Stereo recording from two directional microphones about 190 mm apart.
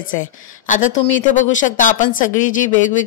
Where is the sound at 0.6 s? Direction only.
40° left (ahead or behind).